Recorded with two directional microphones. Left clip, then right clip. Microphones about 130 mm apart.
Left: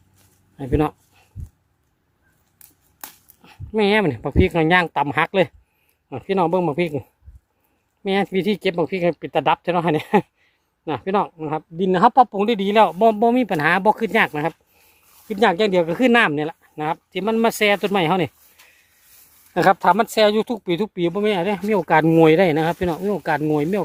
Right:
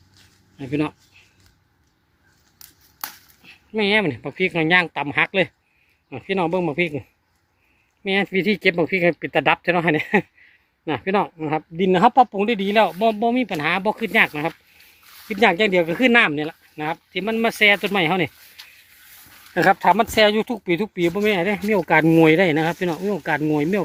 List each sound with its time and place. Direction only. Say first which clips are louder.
0.5 s a sound: left 4 dB; 50° left (ahead or behind)
3.4 s speech: left 3 dB; 50° left (ahead or behind)
8.3 s speech: right 2 dB; 25° left (ahead or behind)
10.8 s speech: even; 15° left (ahead or behind); by 13.1 s 40° left (ahead or behind)
13.1 s speech: left 3 dB; 70° left (ahead or behind); by 14.5 s 40° left (ahead or behind)
15.3 s speech: even; 25° left (ahead or behind)
19.5 s speech: even; 30° left (ahead or behind)